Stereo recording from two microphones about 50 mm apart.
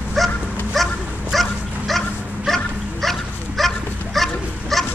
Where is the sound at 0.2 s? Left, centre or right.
Centre.